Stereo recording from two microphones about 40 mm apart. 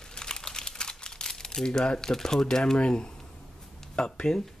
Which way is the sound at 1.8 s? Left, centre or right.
Centre.